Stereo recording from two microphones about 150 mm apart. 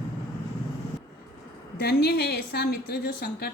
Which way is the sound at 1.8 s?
90° left.